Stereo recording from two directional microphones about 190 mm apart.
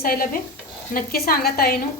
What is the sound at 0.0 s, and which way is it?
A woman's voice, 50° left (ahead or behind).